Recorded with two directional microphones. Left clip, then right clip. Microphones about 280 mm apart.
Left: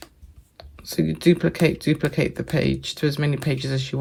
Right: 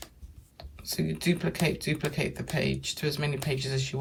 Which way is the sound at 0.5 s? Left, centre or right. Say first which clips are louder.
Left 8 dB; left.